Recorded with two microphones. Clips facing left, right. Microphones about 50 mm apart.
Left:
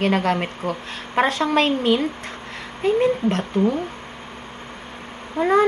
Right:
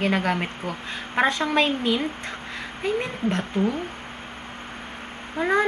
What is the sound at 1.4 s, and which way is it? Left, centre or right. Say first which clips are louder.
Speech: left 3 dB; left.